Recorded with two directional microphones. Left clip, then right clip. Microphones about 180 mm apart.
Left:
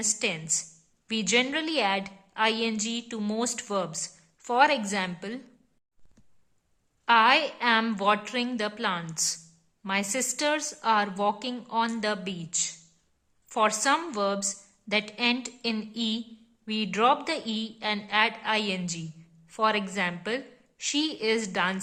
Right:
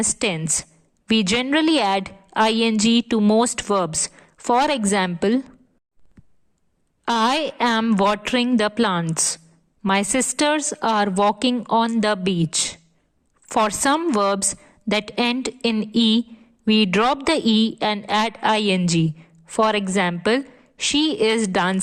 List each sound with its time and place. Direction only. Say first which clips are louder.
0.0 s a woman's voice: right 6 dB; 45° right (ahead or behind)
3.2 s speech: right 14 dB; 25° right (ahead or behind)
3.4 s a woman's voice: right 9 dB; 45° right (ahead or behind)
7.0 s a woman's voice: right 1 dB; 50° right (ahead or behind)